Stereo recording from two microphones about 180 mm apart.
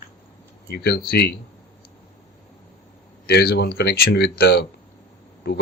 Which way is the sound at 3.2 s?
60° left (ahead or behind).